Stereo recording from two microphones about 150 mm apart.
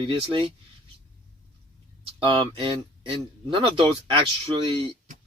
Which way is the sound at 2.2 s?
35° right (ahead or behind).